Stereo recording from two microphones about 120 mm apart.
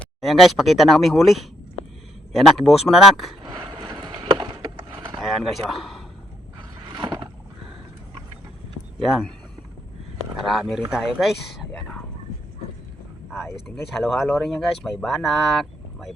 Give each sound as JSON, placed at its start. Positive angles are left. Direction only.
{"t": 0.0, "sound": "speech", "side_deg": 0}
{"t": 3.5, "sound": "boat", "side_deg": -40}
{"t": 5.4, "sound": "speech", "side_deg": 0}
{"t": 6.9, "sound": "boat", "side_deg": -40}
{"t": 9.0, "sound": "speech", "side_deg": 0}
{"t": 10.4, "sound": "speech", "side_deg": 0}
{"t": 14.0, "sound": "speech", "side_deg": 0}